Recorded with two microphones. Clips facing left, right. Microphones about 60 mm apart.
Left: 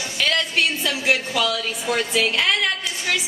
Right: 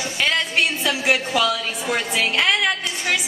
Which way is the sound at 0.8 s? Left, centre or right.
Centre.